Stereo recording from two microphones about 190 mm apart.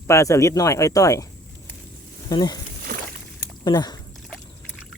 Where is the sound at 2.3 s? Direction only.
20° left (ahead or behind).